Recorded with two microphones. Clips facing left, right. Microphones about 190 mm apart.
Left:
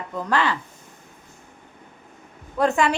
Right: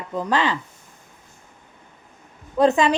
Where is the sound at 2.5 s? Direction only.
20° right (ahead or behind).